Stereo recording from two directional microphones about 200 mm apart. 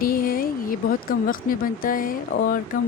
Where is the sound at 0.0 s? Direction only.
45° left (ahead or behind).